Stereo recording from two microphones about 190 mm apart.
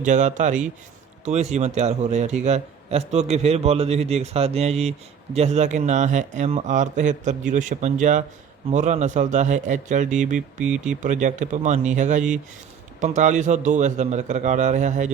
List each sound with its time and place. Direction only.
0.0 s a man's voice: 40° right (ahead or behind)
10.3 s speech: 5° right (ahead or behind)
11.0 s a man's voice: 40° right (ahead or behind)